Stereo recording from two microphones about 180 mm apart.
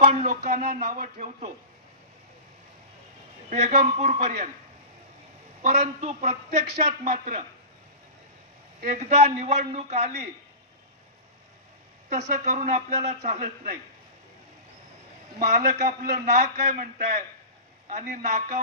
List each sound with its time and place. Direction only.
0.0 s speech: 40° right (ahead or behind)
3.4 s a man's voice: 35° right (ahead or behind)
5.6 s a man's voice: 40° right (ahead or behind)
8.8 s a man's voice: 40° right (ahead or behind)
12.1 s a man's voice: 40° right (ahead or behind)
15.3 s a man's voice: 45° right (ahead or behind)